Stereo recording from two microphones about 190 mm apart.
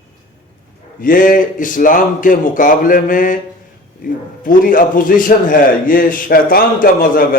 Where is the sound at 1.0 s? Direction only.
45° left (ahead or behind).